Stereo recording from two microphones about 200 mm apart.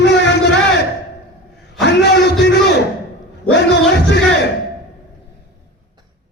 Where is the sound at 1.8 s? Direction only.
60° left (ahead or behind).